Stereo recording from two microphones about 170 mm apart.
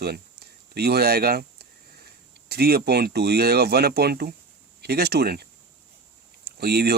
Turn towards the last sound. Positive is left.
turn(degrees=-70)  # may be behind; listen again after turning